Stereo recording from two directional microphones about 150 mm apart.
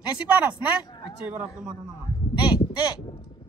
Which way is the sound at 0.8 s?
30° left (ahead or behind).